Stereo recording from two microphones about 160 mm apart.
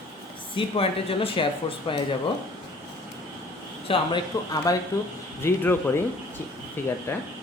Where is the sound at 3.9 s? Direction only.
35° left (ahead or behind).